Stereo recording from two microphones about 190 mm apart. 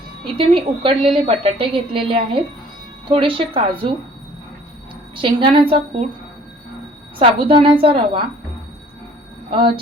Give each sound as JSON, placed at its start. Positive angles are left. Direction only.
{"t": 0.3, "sound": "a woman's voice", "side_deg": -30}
{"t": 5.1, "sound": "a woman's voice", "side_deg": -25}
{"t": 7.2, "sound": "a woman's voice", "side_deg": -30}
{"t": 9.5, "sound": "a woman's voice", "side_deg": -25}